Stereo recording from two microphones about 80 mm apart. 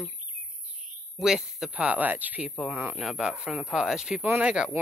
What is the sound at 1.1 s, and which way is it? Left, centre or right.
Speech, centre.